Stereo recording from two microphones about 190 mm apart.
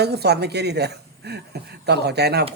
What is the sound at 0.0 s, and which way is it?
A woman's voice, 60° right (ahead or behind).